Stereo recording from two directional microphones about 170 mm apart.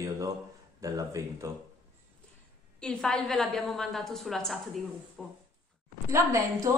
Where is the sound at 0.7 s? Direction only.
20° right (ahead or behind).